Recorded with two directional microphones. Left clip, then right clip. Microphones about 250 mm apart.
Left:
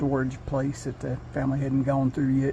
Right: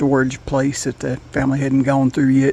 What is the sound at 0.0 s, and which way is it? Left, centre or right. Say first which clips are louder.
A man's voice: right 10 dB; right.